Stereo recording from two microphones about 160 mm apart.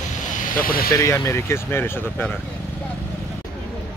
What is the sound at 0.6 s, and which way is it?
Speech, 65° left (ahead or behind).